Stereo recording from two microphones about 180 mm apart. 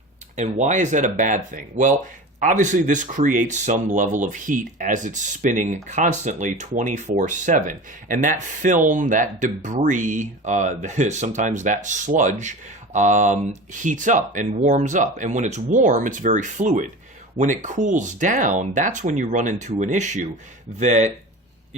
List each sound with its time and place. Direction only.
0.3 s speech: 40° right (ahead or behind)